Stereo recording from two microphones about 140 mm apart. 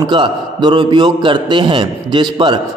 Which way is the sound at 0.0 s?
35° right (ahead or behind).